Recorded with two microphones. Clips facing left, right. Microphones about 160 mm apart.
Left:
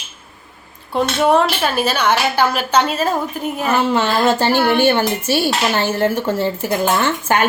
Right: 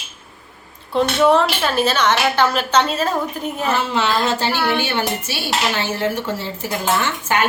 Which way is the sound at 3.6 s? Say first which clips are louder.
Left 3 dB; 55° left (ahead or behind).